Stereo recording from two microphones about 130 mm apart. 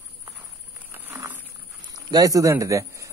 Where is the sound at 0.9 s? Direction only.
15° right (ahead or behind).